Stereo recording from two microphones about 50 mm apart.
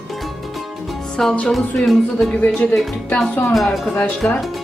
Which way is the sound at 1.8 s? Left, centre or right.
Centre.